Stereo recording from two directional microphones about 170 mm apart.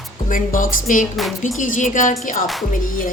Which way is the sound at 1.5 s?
50° left (ahead or behind).